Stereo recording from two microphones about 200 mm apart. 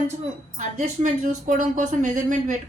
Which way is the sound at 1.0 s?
40° right (ahead or behind).